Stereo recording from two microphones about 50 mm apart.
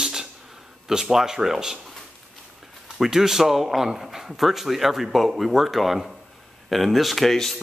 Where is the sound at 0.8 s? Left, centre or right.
Centre.